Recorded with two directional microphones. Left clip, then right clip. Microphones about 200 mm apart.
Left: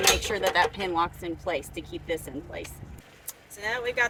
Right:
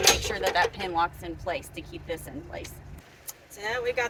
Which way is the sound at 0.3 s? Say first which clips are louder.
Left 1 dB; 10° left (ahead or behind).